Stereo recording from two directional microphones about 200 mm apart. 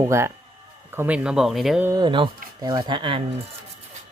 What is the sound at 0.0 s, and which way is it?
Speech, 15° right (ahead or behind).